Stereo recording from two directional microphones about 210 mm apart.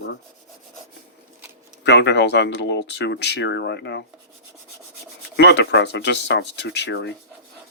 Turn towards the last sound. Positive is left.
turn(degrees=55)  # may be behind; listen again after turning